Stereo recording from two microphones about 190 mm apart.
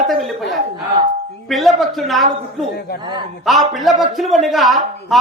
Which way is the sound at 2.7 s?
55° left (ahead or behind).